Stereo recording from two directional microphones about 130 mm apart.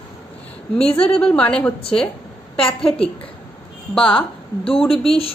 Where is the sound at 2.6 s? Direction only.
45° left (ahead or behind).